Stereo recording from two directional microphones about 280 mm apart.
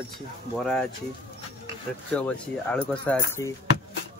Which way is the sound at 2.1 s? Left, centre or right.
Centre.